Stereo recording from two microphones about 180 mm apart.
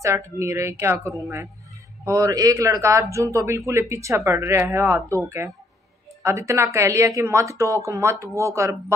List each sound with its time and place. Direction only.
0.0 s speech: 15° right (ahead or behind)